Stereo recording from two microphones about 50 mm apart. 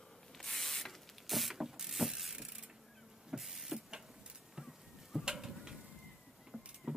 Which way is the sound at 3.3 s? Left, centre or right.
Centre.